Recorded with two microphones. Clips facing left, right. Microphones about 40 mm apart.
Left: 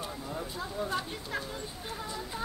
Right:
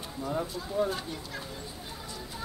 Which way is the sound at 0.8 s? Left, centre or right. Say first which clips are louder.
Right 7 dB; centre.